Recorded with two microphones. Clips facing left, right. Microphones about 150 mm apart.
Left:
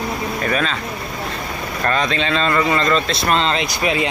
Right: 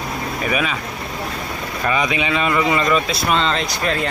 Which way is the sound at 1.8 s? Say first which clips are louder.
Even; 10° right (ahead or behind).